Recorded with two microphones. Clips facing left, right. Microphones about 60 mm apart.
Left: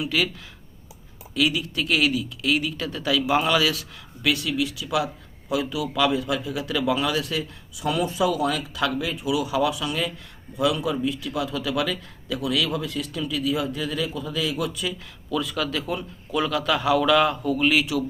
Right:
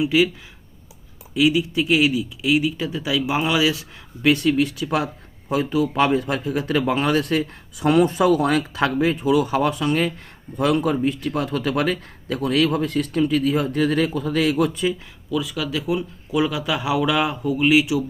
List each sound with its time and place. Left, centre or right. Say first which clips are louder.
0.0 s speech: right 7 dB; centre
1.3 s a man's voice: right 5 dB; centre; by 14.9 s right
15.3 s speech: right 1 dB; centre